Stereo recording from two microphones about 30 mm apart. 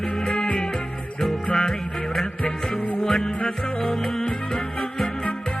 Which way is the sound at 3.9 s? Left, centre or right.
Centre.